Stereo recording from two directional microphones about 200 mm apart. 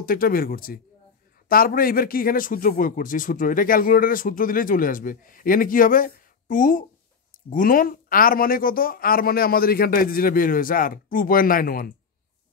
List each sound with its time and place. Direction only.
0.0 s speech: 45° left (ahead or behind)